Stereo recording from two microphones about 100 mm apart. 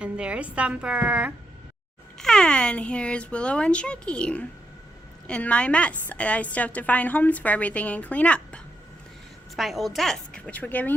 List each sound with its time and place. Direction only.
0.0 s a woman's voice: 10° right (ahead or behind)
2.1 s speech: 5° left (ahead or behind)
9.6 s a woman's voice: centre (ahead or behind)
10.5 s speech: 15° left (ahead or behind)